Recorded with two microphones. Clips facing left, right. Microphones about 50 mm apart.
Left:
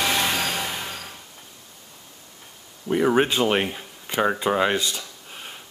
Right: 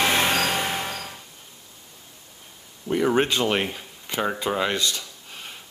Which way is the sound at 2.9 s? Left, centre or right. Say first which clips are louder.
Left 1 dB; centre.